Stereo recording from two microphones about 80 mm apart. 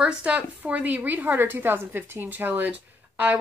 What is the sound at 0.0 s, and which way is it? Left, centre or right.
A woman's voice, centre.